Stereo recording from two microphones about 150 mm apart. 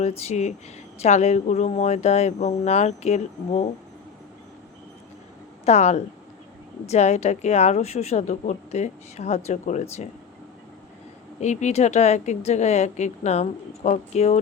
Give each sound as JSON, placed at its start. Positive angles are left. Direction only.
{"t": 0.0, "sound": "a woman's voice", "side_deg": 45}
{"t": 5.6, "sound": "a woman's voice", "side_deg": 50}
{"t": 11.3, "sound": "a woman's voice", "side_deg": 50}